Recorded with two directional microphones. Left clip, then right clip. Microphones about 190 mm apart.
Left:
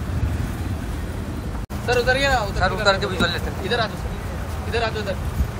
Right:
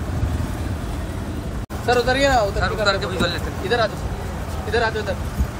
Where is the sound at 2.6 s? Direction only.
5° right (ahead or behind).